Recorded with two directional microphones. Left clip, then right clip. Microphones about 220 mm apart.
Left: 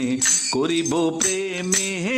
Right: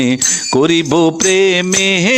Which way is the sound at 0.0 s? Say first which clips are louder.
Right 7 dB; 45° right (ahead or behind).